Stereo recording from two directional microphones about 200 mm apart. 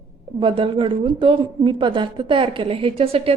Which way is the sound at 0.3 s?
25° right (ahead or behind).